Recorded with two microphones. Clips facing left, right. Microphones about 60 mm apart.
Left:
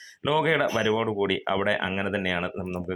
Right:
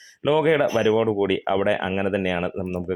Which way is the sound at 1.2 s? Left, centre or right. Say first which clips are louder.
Right 4 dB; right.